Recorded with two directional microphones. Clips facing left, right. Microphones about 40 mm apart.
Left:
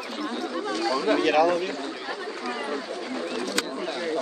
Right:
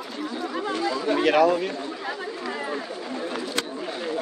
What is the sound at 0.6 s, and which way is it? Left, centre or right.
Chatter, right.